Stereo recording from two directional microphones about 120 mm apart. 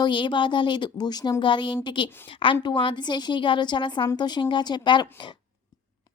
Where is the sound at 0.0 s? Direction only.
40° left (ahead or behind).